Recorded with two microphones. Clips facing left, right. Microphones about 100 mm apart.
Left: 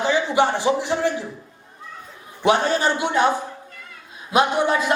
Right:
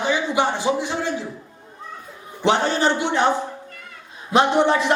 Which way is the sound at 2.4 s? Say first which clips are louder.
Even; 25° right (ahead or behind).